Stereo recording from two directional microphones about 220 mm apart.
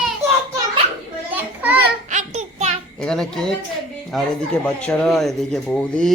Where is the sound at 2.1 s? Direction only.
35° right (ahead or behind).